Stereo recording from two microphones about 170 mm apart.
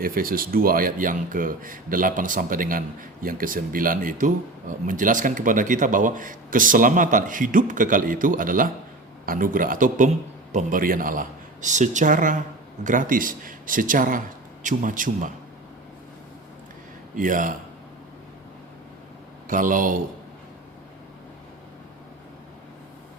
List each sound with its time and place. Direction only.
0.0 s speech: 55° right (ahead or behind)
17.2 s speech: 50° right (ahead or behind)
19.5 s speech: 50° right (ahead or behind)